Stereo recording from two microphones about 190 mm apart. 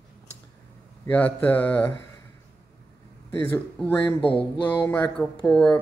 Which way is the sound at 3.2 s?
10° left (ahead or behind).